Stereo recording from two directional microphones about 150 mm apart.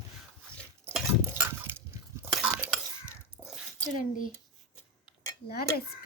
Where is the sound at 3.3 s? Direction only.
5° right (ahead or behind).